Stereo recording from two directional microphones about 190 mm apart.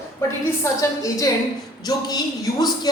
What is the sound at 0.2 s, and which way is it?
A woman's voice, 15° left (ahead or behind).